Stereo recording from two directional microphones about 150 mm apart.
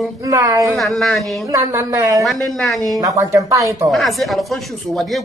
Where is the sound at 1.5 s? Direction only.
20° right (ahead or behind).